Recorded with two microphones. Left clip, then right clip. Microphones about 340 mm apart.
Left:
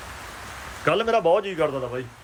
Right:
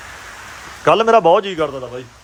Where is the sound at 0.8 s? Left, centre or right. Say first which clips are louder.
Right 9 dB; centre.